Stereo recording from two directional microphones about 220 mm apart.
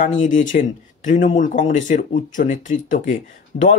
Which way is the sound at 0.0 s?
35° left (ahead or behind).